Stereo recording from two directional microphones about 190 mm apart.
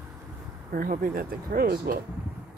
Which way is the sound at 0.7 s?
45° right (ahead or behind).